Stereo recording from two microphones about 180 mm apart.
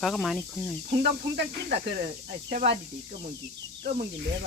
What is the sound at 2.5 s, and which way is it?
Speech, 35° right (ahead or behind).